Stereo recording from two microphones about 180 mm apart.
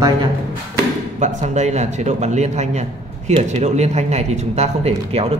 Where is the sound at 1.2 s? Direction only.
40° right (ahead or behind).